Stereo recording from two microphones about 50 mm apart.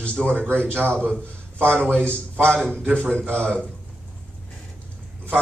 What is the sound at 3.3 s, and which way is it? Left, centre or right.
Speech, left.